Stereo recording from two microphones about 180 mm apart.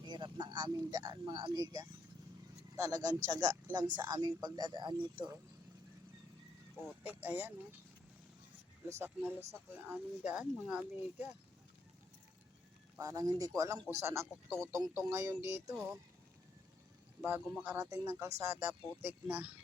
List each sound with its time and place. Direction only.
0.0 s speech: 25° right (ahead or behind)
7.0 s speech: 10° right (ahead or behind)
8.9 s speech: 15° right (ahead or behind)
13.0 s speech: 20° right (ahead or behind)
17.5 s speech: 5° right (ahead or behind)
17.7 s speech: 15° right (ahead or behind)